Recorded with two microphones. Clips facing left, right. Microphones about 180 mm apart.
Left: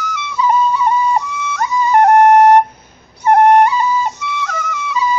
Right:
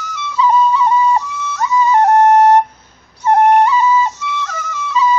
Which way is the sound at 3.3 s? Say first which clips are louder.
Left 1 dB; 60° left (ahead or behind).